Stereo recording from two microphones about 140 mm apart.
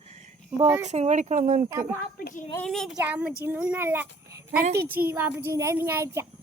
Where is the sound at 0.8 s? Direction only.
55° right (ahead or behind).